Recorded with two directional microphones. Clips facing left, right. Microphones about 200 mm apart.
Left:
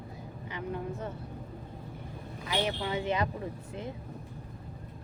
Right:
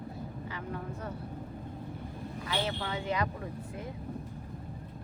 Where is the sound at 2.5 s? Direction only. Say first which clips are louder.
Left 3 dB; 20° left (ahead or behind).